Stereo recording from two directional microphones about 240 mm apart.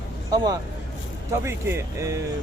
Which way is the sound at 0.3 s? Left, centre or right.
Centre.